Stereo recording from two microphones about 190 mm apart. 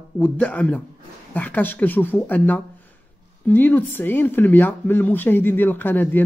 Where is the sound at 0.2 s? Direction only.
5° left (ahead or behind).